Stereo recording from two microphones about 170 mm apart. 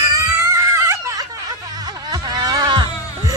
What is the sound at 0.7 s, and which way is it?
Whimper, 15° right (ahead or behind).